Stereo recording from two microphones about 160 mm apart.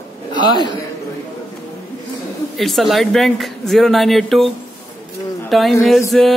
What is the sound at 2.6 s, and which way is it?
Speech, centre (ahead or behind).